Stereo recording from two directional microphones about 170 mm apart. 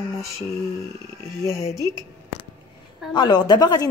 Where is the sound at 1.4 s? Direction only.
20° left (ahead or behind).